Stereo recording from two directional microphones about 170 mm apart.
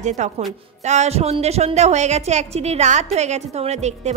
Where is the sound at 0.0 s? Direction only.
45° right (ahead or behind).